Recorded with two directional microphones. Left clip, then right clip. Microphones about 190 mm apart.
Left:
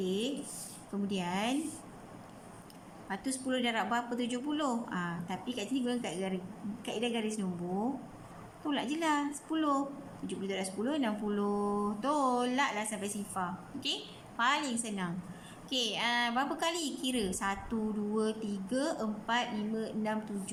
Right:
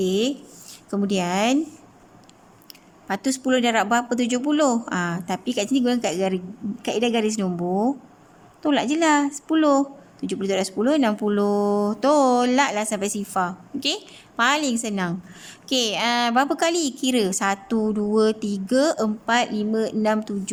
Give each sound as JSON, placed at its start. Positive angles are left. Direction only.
{"t": 0.0, "sound": "a woman's voice", "side_deg": -60}
{"t": 3.1, "sound": "a woman's voice", "side_deg": -55}